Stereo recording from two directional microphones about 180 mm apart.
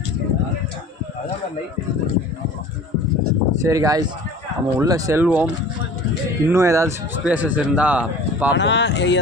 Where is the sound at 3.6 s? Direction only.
20° right (ahead or behind).